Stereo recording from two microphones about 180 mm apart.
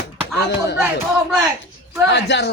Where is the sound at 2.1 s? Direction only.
70° left (ahead or behind).